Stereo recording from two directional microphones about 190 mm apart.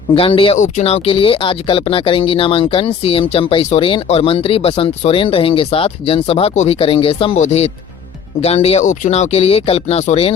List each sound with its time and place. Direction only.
0.1 s speech: 30° left (ahead or behind)